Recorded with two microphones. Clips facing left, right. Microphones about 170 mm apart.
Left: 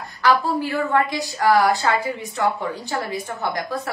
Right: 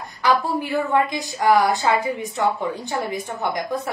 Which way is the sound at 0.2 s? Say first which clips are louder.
Left 1 dB; 15° right (ahead or behind).